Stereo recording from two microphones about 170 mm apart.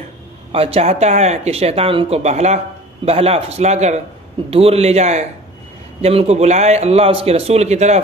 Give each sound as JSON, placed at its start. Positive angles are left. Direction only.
{"t": 0.5, "sound": "speech", "side_deg": -35}